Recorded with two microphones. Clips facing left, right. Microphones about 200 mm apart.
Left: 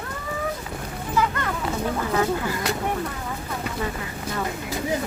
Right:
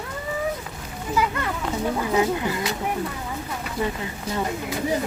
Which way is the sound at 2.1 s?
20° right (ahead or behind).